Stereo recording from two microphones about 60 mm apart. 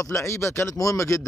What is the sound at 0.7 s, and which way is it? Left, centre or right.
Speech, left.